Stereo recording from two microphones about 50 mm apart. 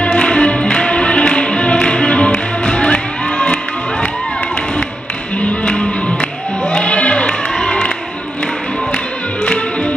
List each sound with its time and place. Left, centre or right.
0.0 s music: centre
5.4 s tap: left
6.7 s music: left
9.4 s music: left